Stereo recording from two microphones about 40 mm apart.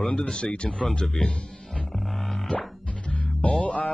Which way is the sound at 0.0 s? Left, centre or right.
Centre.